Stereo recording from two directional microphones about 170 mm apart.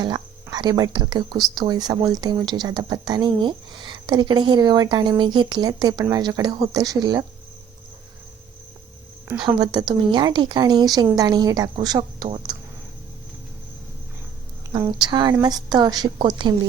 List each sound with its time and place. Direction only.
0.5 s speech: 25° right (ahead or behind)
9.4 s speech: 25° right (ahead or behind)
14.7 s speech: 20° right (ahead or behind)